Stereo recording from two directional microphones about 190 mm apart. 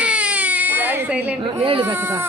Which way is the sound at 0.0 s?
5° right (ahead or behind).